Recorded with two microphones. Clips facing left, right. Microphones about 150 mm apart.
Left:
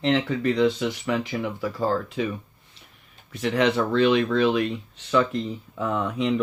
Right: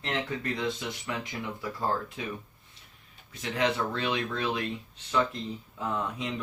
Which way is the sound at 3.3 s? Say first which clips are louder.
Left 7 dB; 70° left (ahead or behind).